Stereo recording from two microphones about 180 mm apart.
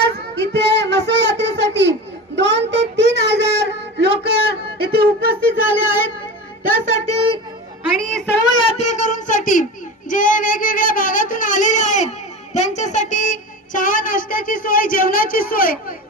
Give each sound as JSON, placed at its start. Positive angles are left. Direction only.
{"t": 0.0, "sound": "child singing", "side_deg": -70}
{"t": 4.2, "sound": "a sound", "side_deg": -60}
{"t": 6.6, "sound": "speech", "side_deg": -50}
{"t": 7.0, "sound": "speech", "side_deg": -35}
{"t": 7.9, "sound": "a woman's voice", "side_deg": 0}
{"t": 8.6, "sound": "speech", "side_deg": 40}
{"t": 10.1, "sound": "a sound", "side_deg": 45}
{"t": 12.5, "sound": "a woman's voice", "side_deg": 40}